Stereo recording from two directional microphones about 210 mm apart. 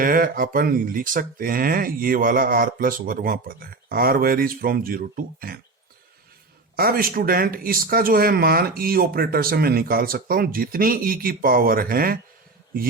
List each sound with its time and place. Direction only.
0.0 s speech: 45° right (ahead or behind)
6.7 s speech: 45° right (ahead or behind)